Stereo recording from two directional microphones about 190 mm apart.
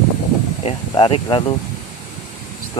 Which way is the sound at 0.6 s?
30° left (ahead or behind).